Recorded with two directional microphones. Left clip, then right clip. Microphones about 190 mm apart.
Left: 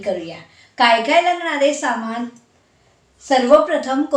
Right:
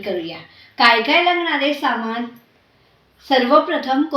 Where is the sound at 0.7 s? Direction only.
15° left (ahead or behind).